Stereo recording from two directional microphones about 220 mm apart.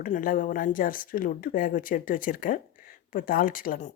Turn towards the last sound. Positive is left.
turn(degrees=35)  # may be behind; listen again after turning